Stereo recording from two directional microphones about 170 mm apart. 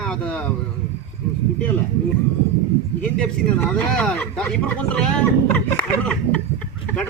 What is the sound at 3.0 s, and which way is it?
Speech, 5° left (ahead or behind).